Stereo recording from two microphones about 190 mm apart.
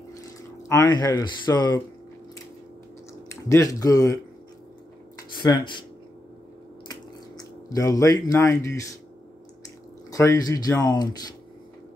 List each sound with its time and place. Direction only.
0.7 s speech: 20° left (ahead or behind)
3.4 s speech: 15° left (ahead or behind)
5.3 s speech: 25° left (ahead or behind)
6.9 s a sound: 20° left (ahead or behind)
10.1 s speech: 20° left (ahead or behind)